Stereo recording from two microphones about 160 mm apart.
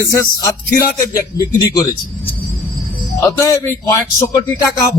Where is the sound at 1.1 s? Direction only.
20° left (ahead or behind).